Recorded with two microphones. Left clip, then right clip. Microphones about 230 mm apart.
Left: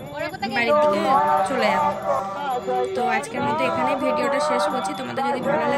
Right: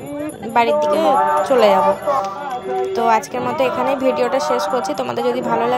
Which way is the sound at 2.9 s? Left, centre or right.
Centre.